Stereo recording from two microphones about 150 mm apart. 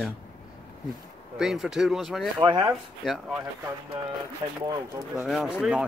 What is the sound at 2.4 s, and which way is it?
Speech, 30° right (ahead or behind).